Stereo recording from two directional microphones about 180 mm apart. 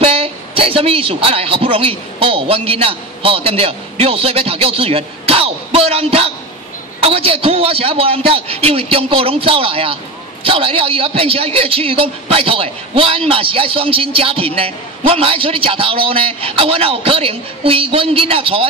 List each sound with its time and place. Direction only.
0.0 s a man's voice: 30° right (ahead or behind)